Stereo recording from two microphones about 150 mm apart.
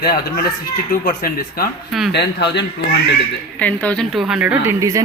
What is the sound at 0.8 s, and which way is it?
Speech, 75° left (ahead or behind).